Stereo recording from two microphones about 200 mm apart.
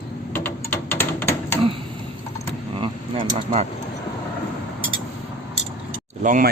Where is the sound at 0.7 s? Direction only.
10° left (ahead or behind).